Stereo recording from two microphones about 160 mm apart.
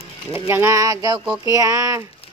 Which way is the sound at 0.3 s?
15° right (ahead or behind).